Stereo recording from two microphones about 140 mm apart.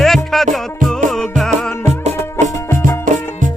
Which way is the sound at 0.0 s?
Centre (ahead or behind).